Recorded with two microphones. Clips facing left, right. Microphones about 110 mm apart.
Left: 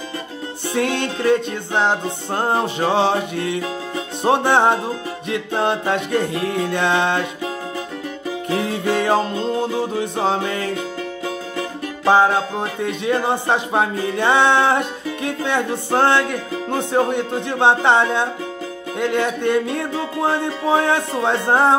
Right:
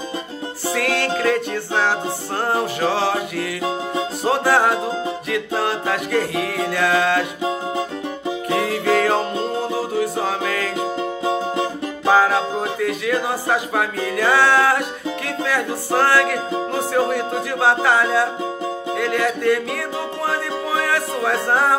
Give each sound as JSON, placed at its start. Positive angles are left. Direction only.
{"t": 0.7, "sound": "music", "side_deg": 25}
{"t": 8.5, "sound": "music", "side_deg": 25}
{"t": 12.1, "sound": "music", "side_deg": 25}